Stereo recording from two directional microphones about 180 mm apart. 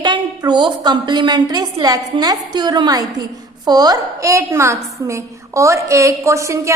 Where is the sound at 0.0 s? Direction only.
25° right (ahead or behind).